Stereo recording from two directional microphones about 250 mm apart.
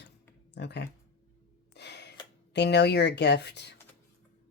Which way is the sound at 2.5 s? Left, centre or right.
Left.